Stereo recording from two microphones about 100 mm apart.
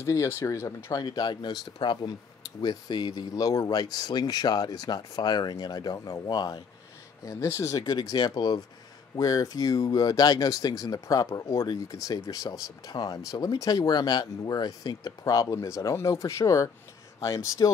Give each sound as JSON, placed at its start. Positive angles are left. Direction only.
{"t": 0.0, "sound": "speech", "side_deg": 30}
{"t": 0.9, "sound": "speech", "side_deg": 45}
{"t": 7.2, "sound": "speech", "side_deg": 30}